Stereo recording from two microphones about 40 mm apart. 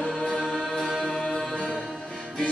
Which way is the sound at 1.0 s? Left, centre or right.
Centre.